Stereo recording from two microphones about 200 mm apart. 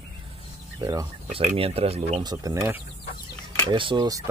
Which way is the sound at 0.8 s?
15° right (ahead or behind).